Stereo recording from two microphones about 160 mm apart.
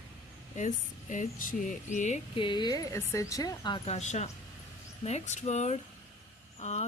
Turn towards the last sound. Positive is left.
turn(degrees=45)  # may be behind; listen again after turning